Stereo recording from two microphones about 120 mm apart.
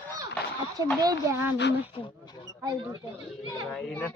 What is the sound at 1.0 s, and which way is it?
Speech, 20° right (ahead or behind).